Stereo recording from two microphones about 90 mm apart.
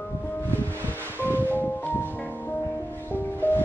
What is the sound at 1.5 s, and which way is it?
Music, 20° left (ahead or behind).